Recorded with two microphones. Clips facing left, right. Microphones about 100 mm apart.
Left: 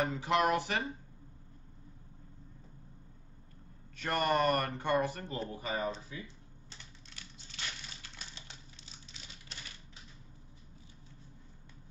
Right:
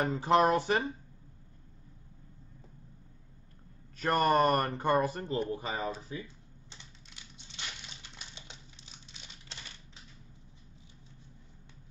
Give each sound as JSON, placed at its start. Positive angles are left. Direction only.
{"t": 0.0, "sound": "speech", "side_deg": -35}
{"t": 3.9, "sound": "speech", "side_deg": -40}
{"t": 6.7, "sound": "a sound", "side_deg": -20}